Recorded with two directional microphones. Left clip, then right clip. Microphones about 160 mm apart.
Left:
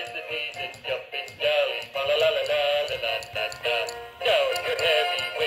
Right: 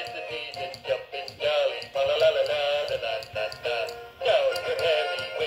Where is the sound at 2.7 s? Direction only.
15° left (ahead or behind).